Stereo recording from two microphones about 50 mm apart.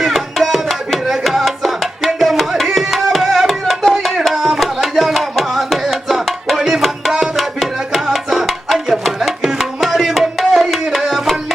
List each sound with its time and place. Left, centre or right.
0.0 s tabla: centre
9.5 s music: centre